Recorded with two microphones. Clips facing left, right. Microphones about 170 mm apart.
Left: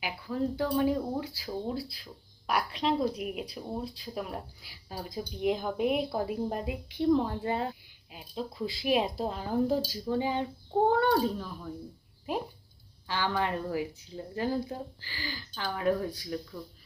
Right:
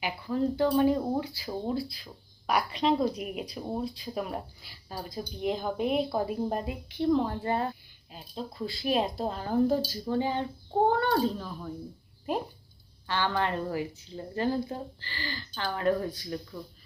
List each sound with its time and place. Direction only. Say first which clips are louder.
0.0 s speech: right 3 dB; 5° left (ahead or behind)
4.6 s a woman's voice: right 1 dB; 10° left (ahead or behind)
13.1 s a woman's voice: right 1 dB; 10° left (ahead or behind)